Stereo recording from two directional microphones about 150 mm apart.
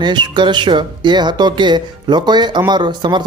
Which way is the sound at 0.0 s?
30° right (ahead or behind).